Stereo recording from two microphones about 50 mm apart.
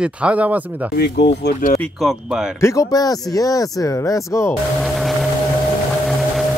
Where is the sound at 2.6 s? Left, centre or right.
Left.